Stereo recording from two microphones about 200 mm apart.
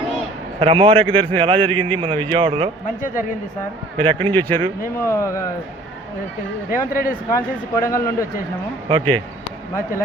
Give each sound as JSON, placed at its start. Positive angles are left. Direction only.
{"t": 0.6, "sound": "a man's voice", "side_deg": -25}
{"t": 3.9, "sound": "a man's voice", "side_deg": -25}
{"t": 4.9, "sound": "speech", "side_deg": 15}
{"t": 6.7, "sound": "speech", "side_deg": 45}
{"t": 7.3, "sound": "speech", "side_deg": 15}
{"t": 8.9, "sound": "a man's voice", "side_deg": -25}